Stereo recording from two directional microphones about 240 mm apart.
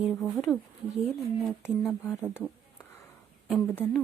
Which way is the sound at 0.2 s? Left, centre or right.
Centre.